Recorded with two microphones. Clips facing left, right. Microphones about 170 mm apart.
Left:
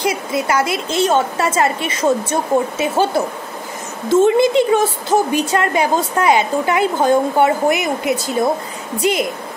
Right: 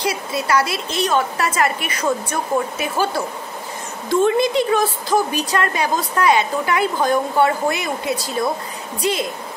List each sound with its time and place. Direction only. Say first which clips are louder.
0.1 s a woman's voice: left 2 dB; 20° left (ahead or behind)